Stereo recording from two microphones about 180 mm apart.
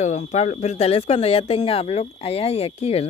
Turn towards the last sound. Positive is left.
turn(degrees=35)  # may be behind; listen again after turning